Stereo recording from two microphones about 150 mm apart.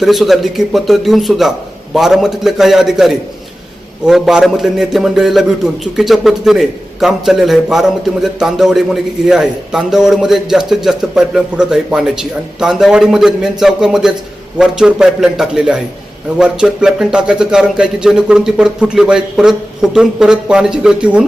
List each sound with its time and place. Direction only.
0.0 s a man's voice: centre (ahead or behind)